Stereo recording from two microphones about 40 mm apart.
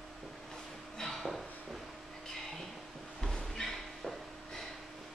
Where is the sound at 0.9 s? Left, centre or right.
Centre.